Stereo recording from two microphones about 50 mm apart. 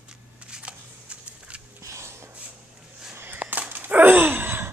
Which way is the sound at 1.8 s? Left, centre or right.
Right.